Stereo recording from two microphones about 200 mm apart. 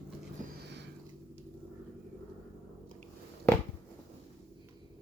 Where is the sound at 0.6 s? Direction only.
60° right (ahead or behind).